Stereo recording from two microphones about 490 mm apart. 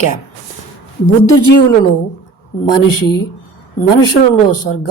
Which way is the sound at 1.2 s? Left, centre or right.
Left.